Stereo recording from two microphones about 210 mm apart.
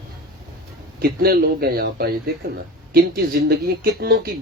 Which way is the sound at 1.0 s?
45° right (ahead or behind).